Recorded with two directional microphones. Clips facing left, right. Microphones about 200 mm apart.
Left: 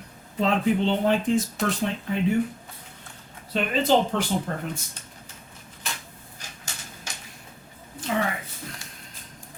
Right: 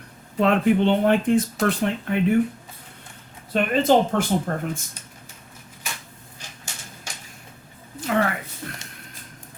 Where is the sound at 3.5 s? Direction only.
50° right (ahead or behind).